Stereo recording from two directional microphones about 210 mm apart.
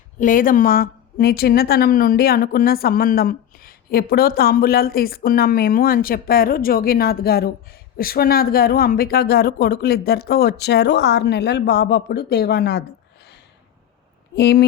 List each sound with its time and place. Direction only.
0.2 s a woman's voice: 40° left (ahead or behind)
14.3 s a woman's voice: 50° left (ahead or behind)